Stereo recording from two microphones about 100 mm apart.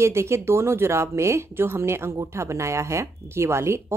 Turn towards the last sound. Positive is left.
turn(degrees=-25)  # may be behind; listen again after turning